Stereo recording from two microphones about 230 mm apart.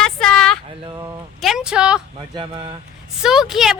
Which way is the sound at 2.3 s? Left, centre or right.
Right.